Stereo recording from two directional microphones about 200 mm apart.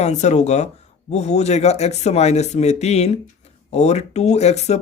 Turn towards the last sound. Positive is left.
turn(degrees=35)  # may be behind; listen again after turning